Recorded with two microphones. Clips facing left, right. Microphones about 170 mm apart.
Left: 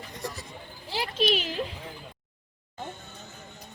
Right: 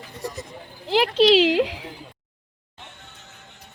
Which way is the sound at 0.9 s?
90° right.